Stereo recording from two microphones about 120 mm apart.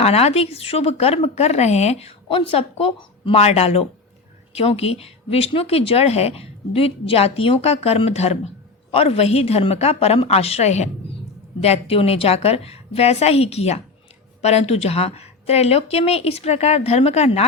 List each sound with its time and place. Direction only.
0.0 s speech: 60° left (ahead or behind)
11.6 s speech: 55° left (ahead or behind)